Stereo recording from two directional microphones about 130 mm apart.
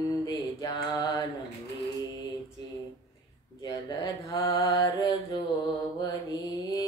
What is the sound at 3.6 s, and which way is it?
Mantra, 30° left (ahead or behind).